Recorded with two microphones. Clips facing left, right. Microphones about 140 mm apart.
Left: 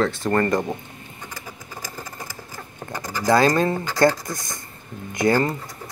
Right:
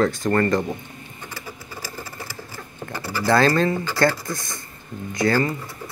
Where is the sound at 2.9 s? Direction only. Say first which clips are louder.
Left 1 dB; 15° left (ahead or behind).